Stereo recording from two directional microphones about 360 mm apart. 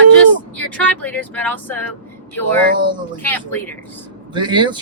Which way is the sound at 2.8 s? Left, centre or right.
Centre.